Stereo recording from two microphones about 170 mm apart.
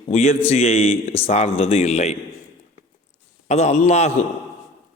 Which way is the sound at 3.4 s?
40° left (ahead or behind).